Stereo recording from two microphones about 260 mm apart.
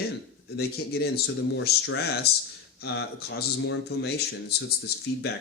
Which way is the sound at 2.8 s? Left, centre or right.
Left.